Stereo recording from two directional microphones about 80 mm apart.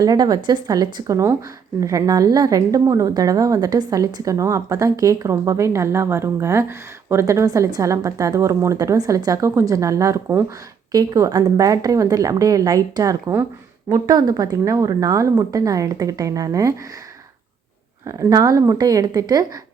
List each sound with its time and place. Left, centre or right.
0.0 s speech: right
7.4 s speech: right
10.9 s speech: right
18.0 s speech: right
18.8 s speech: right